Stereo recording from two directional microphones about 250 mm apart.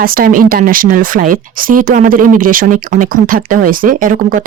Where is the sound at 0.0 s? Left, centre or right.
Right.